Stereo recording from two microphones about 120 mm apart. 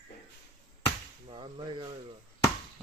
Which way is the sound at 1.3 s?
45° right (ahead or behind).